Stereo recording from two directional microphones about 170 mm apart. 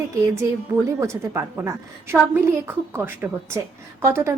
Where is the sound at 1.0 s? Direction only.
15° right (ahead or behind).